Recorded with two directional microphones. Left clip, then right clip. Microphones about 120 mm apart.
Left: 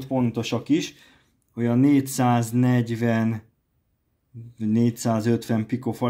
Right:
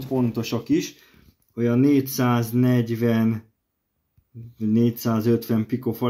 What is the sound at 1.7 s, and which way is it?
Speech, 40° left (ahead or behind).